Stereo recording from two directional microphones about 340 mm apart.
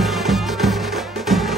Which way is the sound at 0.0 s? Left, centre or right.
Centre.